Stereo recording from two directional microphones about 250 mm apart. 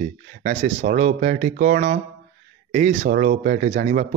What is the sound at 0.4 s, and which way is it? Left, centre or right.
Speech, right.